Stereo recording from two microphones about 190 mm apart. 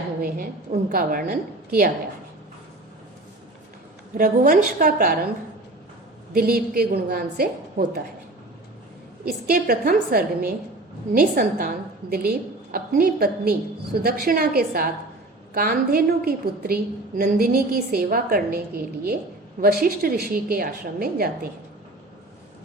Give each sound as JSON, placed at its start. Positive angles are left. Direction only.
{"t": 0.7, "sound": "a woman's voice", "side_deg": -45}
{"t": 4.2, "sound": "a woman's voice", "side_deg": -45}
{"t": 6.3, "sound": "a woman's voice", "side_deg": -55}
{"t": 9.2, "sound": "a woman's voice", "side_deg": -50}